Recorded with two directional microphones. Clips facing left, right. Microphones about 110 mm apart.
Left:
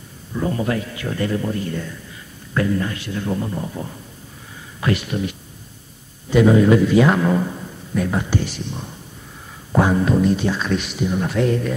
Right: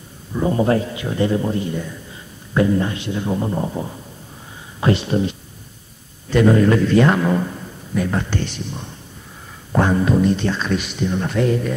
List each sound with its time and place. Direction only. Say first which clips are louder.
0.3 s speech: right 5 dB; 20° right (ahead or behind)
6.3 s a man's voice: left 1 dB; 5° left (ahead or behind)